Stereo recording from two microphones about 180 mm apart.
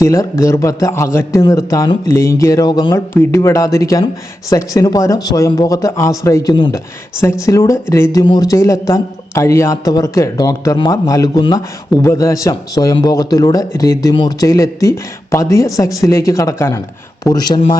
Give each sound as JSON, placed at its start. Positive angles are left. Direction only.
{"t": 0.0, "sound": "a man's voice", "side_deg": 15}